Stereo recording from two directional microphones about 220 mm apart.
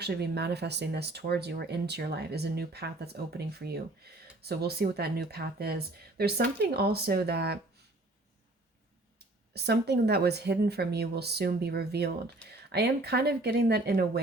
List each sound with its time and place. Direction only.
0.0 s speech: 50° right (ahead or behind)
9.5 s speech: 50° right (ahead or behind)
12.4 s speech: 5° left (ahead or behind)
12.7 s speech: 45° right (ahead or behind)